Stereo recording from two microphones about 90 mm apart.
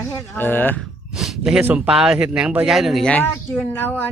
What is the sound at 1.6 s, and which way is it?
Speech, 20° right (ahead or behind).